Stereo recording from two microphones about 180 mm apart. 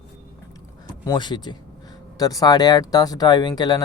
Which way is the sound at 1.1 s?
25° left (ahead or behind).